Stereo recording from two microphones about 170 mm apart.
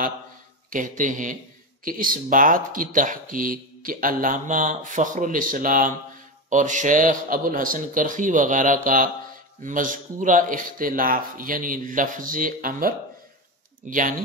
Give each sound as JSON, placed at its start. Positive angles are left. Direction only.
{"t": 0.7, "sound": "speech", "side_deg": -50}